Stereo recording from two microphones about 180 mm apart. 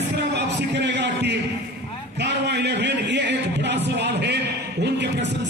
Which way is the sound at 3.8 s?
70° right (ahead or behind).